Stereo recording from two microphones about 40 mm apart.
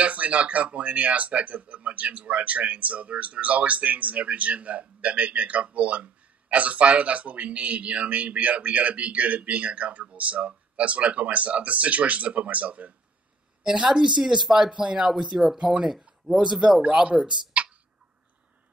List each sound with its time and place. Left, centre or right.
0.0 s speech: right
13.8 s speech: centre
14.4 s speech: centre
14.7 s speech: right
15.1 s speech: centre
15.5 s speech: right
16.3 s speech: centre
17.1 s speech: right
17.5 s a sound: right